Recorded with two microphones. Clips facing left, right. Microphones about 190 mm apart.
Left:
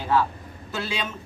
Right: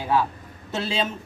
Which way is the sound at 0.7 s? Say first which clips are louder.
Right 4 dB; 25° right (ahead or behind).